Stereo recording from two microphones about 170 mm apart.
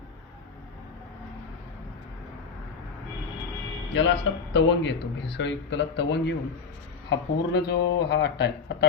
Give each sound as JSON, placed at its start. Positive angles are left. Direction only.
{"t": 3.9, "sound": "speech", "side_deg": 90}